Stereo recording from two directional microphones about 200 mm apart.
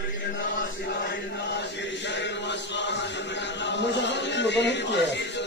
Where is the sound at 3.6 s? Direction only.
60° left (ahead or behind).